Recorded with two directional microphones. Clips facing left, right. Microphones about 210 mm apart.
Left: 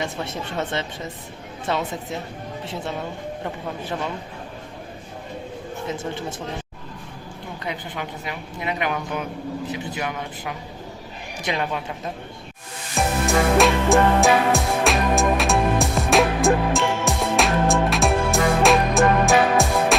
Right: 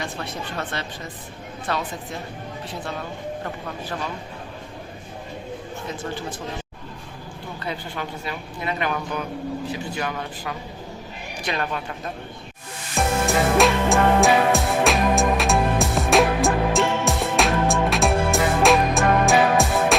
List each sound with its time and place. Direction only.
0.0 s speech: 20° left (ahead or behind)
3.4 s speech: 20° left (ahead or behind)
5.9 s speech: 25° left (ahead or behind)
7.6 s a woman's voice: 15° left (ahead or behind)
13.0 s music: centre (ahead or behind)